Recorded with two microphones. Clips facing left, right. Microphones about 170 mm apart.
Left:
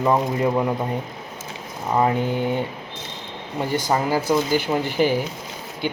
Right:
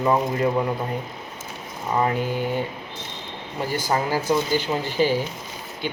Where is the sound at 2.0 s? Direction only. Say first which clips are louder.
Left 3 dB; 20° left (ahead or behind).